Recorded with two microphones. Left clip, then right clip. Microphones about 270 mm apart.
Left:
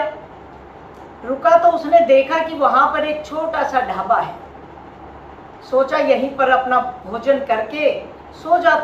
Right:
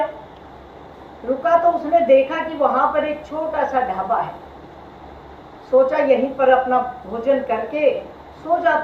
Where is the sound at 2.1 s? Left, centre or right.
Left.